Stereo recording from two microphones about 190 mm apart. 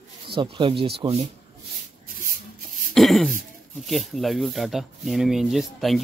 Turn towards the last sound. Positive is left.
turn(degrees=0)  # may be behind; listen again after turning